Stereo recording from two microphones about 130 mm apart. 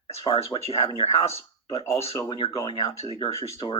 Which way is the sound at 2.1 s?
30° left (ahead or behind).